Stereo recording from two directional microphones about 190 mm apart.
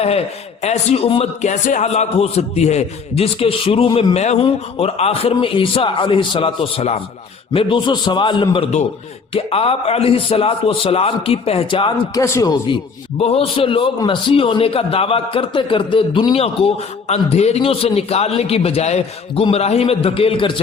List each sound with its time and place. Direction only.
0.6 s a man's voice: 35° left (ahead or behind); by 12.5 s 15° left (ahead or behind)
13.1 s a man's voice: 30° left (ahead or behind)